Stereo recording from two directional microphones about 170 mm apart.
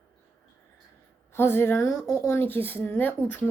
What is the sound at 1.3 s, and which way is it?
Speech, 15° left (ahead or behind).